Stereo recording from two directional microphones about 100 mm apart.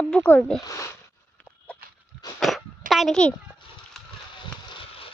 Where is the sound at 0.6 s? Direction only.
35° left (ahead or behind).